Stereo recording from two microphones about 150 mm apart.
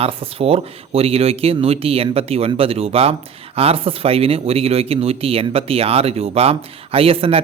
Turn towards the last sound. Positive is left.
turn(degrees=-40)  # may be behind; listen again after turning